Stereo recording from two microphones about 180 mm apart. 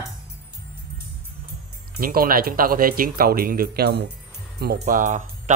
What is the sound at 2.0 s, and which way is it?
Speech, 55° right (ahead or behind).